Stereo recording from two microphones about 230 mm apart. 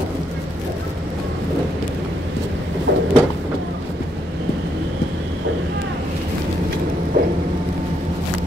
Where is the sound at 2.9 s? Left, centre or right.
Right.